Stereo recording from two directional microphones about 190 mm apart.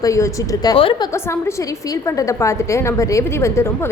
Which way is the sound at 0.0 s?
15° left (ahead or behind).